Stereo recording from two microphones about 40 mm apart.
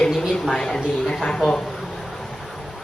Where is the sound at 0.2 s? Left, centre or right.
Centre.